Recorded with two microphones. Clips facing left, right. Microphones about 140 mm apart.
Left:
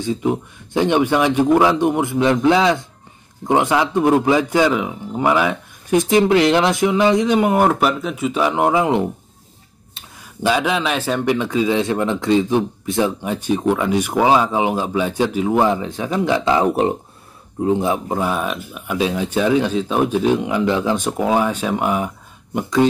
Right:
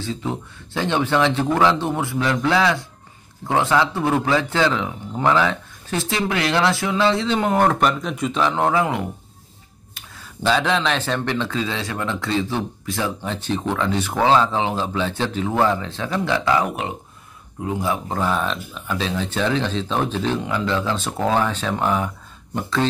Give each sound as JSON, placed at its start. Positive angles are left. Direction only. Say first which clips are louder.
{"t": 0.0, "sound": "speech", "louder": "left 7 dB", "side_deg": 15}
{"t": 10.1, "sound": "speech", "louder": "left 2 dB", "side_deg": 10}
{"t": 17.6, "sound": "speech", "louder": "left 6 dB", "side_deg": 20}